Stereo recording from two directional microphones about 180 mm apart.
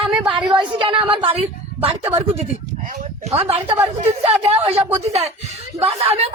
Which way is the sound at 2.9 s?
35° right (ahead or behind).